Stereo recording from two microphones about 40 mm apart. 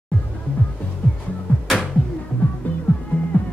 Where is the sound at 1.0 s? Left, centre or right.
Left.